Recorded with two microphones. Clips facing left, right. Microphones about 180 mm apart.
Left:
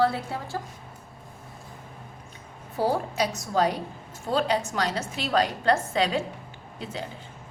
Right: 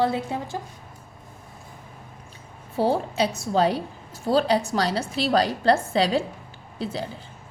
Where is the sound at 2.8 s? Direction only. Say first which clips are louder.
Right 3 dB; 25° right (ahead or behind).